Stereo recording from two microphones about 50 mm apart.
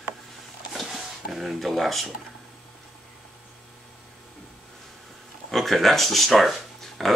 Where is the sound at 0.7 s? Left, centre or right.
Centre.